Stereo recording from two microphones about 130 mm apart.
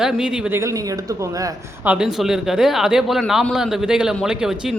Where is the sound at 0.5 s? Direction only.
25° right (ahead or behind).